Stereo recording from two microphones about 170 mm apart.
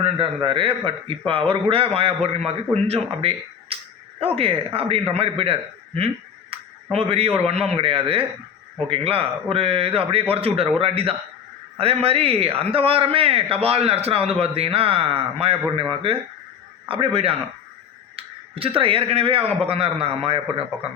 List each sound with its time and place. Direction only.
0.0 s a man's voice: 30° right (ahead or behind)